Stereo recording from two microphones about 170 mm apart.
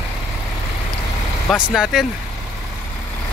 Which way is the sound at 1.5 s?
Centre (ahead or behind).